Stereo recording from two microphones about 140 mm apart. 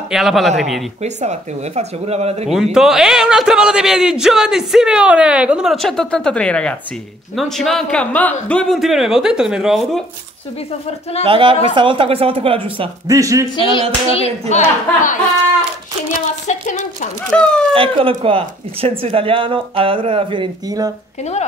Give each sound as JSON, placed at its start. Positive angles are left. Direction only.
{"t": 0.1, "sound": "a man's voice", "side_deg": 0}
{"t": 1.0, "sound": "speech", "side_deg": -55}
{"t": 2.5, "sound": "a man's voice", "side_deg": -5}
{"t": 11.2, "sound": "speech", "side_deg": -40}
{"t": 13.0, "sound": "speech", "side_deg": -25}
{"t": 13.6, "sound": "a sound", "side_deg": 40}
{"t": 14.5, "sound": "a woman's voice", "side_deg": 55}
{"t": 16.4, "sound": "a woman's voice", "side_deg": 60}
{"t": 17.2, "sound": "speech", "side_deg": 5}
{"t": 17.7, "sound": "speech", "side_deg": -40}
{"t": 20.6, "sound": "speech", "side_deg": -25}
{"t": 21.2, "sound": "speech", "side_deg": 50}